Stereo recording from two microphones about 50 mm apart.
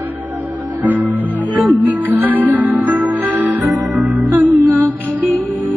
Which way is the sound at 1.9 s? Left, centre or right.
Right.